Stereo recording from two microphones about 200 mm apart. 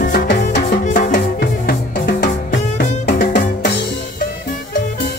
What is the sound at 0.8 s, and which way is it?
Music, 40° left (ahead or behind).